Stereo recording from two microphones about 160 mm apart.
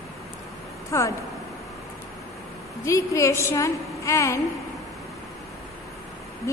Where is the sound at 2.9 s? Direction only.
20° left (ahead or behind).